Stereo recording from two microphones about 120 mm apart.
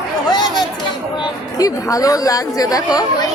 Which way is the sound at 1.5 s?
30° left (ahead or behind).